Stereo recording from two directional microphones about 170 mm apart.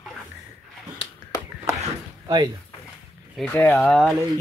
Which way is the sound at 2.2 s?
20° right (ahead or behind).